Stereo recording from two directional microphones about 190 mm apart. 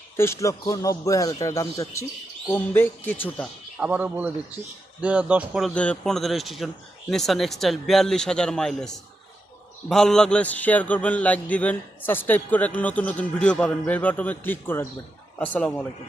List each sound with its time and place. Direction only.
0.2 s a man's voice: 15° left (ahead or behind)
3.8 s a man's voice: 5° right (ahead or behind)